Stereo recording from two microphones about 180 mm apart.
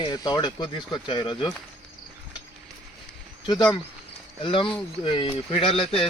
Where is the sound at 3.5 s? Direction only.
25° left (ahead or behind).